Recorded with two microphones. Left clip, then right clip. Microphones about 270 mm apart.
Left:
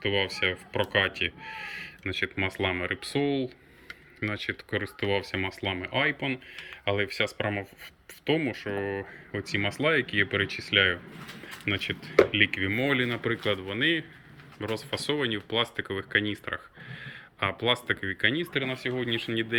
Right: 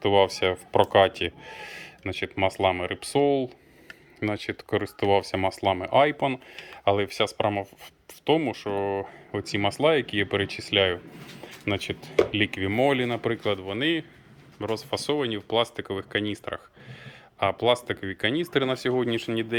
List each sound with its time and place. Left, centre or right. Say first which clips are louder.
0.0 s speech: right 6 dB; centre
18.5 s speech: right 6 dB; centre